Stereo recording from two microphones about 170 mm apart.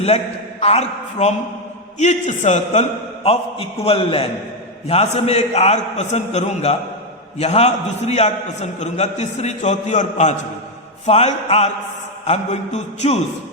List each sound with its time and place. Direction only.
0.6 s a man's voice: 40° left (ahead or behind)